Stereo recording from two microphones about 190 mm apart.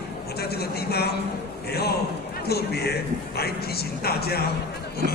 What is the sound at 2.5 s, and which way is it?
Speech, 55° left (ahead or behind).